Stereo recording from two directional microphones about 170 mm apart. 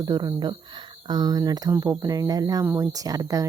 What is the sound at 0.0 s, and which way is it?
Speech, 25° right (ahead or behind).